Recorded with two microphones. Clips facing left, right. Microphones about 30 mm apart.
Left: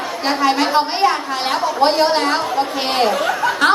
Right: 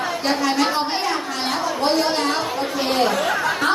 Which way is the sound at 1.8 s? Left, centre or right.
Left.